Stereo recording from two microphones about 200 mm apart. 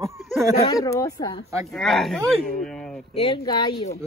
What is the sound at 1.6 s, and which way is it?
Speech, centre (ahead or behind).